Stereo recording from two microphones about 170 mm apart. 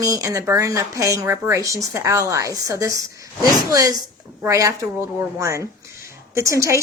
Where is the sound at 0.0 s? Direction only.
20° right (ahead or behind).